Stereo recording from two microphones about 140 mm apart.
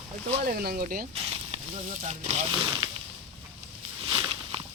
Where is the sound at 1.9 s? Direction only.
55° right (ahead or behind).